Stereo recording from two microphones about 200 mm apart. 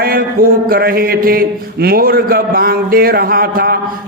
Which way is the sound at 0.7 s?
50° right (ahead or behind).